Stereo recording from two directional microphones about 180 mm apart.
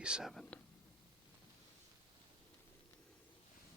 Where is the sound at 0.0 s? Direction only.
5° right (ahead or behind).